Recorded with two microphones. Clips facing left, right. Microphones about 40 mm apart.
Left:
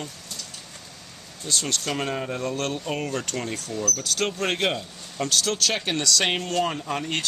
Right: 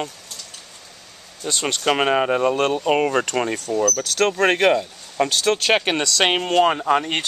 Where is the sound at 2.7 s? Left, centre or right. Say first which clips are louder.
Right 10 dB; right.